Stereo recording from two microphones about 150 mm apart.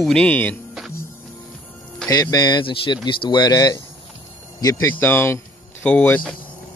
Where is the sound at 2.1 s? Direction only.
25° left (ahead or behind); by 6.4 s 10° left (ahead or behind).